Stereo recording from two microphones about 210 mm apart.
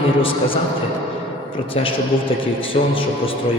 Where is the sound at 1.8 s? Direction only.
25° left (ahead or behind).